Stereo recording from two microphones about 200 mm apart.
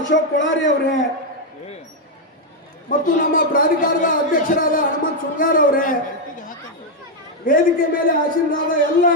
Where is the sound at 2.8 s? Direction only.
45° left (ahead or behind).